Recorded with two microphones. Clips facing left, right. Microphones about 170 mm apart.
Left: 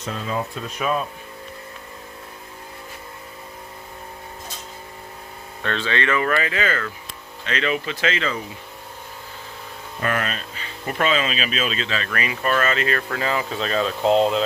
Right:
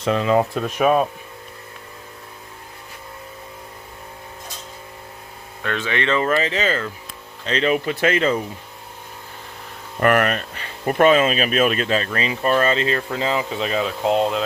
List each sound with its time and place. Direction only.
0.1 s speech: 75° right (ahead or behind); by 1.0 s 55° right (ahead or behind)
5.6 s speech: 15° right (ahead or behind)
7.4 s speech: 35° right (ahead or behind)
10.0 s speech: 60° right (ahead or behind)
10.8 s speech: 45° right (ahead or behind)
12.0 s speech: 25° right (ahead or behind)
13.0 s speech: 15° right (ahead or behind)